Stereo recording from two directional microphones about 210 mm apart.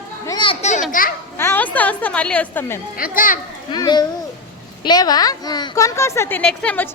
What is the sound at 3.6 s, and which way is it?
A woman's voice, 20° left (ahead or behind).